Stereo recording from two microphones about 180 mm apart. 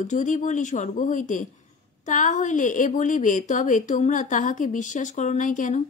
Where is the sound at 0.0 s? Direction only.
45° left (ahead or behind).